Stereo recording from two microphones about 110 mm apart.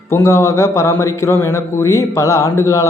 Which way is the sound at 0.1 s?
25° left (ahead or behind).